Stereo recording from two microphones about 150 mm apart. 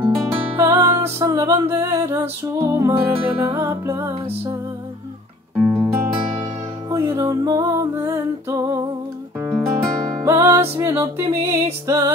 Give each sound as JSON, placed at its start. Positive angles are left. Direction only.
{"t": 0.3, "sound": "music", "side_deg": -25}
{"t": 5.6, "sound": "music", "side_deg": -5}
{"t": 6.9, "sound": "music", "side_deg": -20}